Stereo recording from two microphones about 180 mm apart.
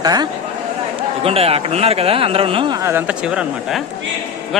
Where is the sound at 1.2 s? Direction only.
35° right (ahead or behind).